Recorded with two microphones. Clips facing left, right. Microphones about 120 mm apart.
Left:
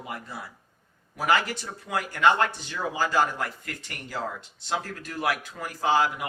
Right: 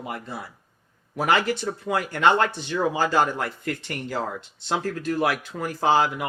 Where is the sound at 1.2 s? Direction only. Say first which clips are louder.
Right 3 dB; 30° right (ahead or behind).